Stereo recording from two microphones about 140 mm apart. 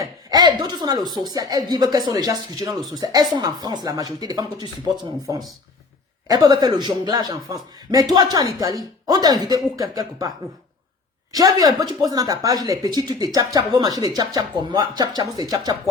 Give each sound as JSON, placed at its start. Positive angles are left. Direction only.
{"t": 0.0, "sound": "a woman's voice", "side_deg": -30}
{"t": 6.2, "sound": "speech", "side_deg": -25}